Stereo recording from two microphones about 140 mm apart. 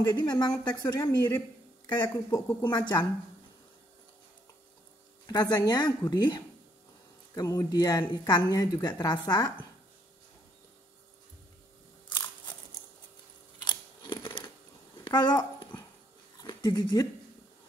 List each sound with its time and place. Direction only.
0.0 s a woman's voice: 30° left (ahead or behind)
2.8 s a woman's voice: 35° left (ahead or behind)
5.2 s a woman's voice: 30° left (ahead or behind)
13.7 s a sound: 35° left (ahead or behind)